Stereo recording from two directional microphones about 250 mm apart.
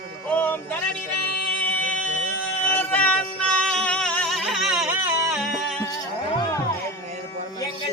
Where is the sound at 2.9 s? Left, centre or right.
Centre.